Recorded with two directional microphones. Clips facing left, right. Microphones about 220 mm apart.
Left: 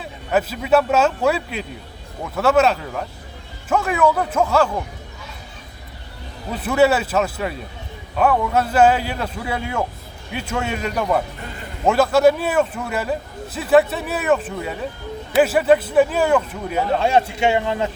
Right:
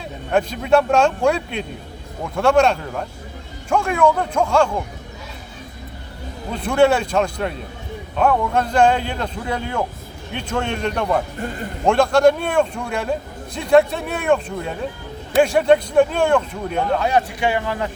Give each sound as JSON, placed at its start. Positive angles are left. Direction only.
{"t": 0.0, "sound": "a man's voice", "side_deg": 5}
{"t": 6.5, "sound": "a man's voice", "side_deg": 5}
{"t": 17.0, "sound": "speech", "side_deg": 25}